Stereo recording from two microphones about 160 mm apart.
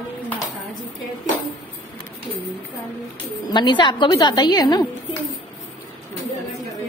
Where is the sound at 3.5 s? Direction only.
30° left (ahead or behind).